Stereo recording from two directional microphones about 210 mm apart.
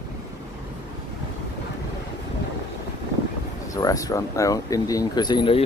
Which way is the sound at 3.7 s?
15° left (ahead or behind).